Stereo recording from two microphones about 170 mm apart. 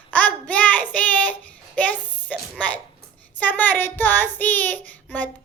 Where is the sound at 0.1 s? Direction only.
10° left (ahead or behind).